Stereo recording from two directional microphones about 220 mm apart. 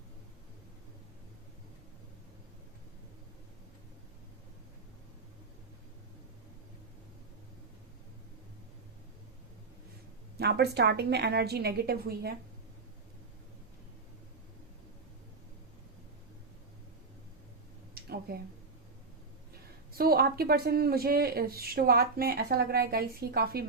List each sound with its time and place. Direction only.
10.3 s speech: 45° right (ahead or behind)
17.9 s a sound: 45° right (ahead or behind)
19.9 s speech: 45° right (ahead or behind)